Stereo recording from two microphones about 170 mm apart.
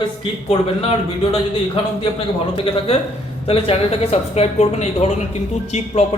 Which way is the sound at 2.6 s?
35° left (ahead or behind).